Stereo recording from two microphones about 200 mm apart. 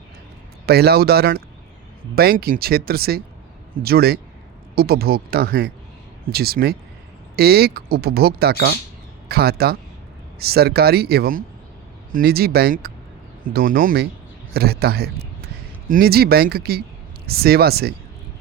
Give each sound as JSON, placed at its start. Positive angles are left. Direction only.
{"t": 0.6, "sound": "a man's voice", "side_deg": -50}